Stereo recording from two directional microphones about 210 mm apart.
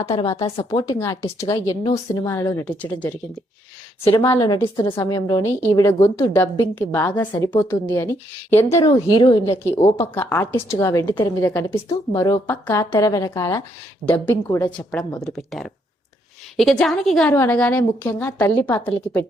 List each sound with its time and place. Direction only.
0.1 s a woman's voice: 15° left (ahead or behind)
0.5 s a woman's voice: 25° left (ahead or behind)
15.2 s a woman's voice: centre (ahead or behind)